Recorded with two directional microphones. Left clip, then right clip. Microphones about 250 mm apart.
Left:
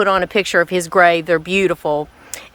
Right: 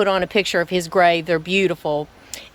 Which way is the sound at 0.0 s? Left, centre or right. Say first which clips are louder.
Left 3 dB; centre.